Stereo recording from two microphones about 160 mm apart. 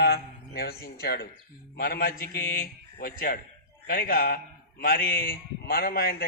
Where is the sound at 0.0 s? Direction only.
85° left.